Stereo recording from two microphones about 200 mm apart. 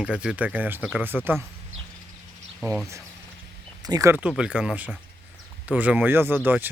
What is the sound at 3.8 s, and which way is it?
Speech, 20° right (ahead or behind).